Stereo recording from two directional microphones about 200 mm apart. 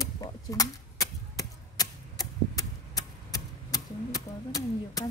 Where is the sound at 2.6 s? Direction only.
15° left (ahead or behind).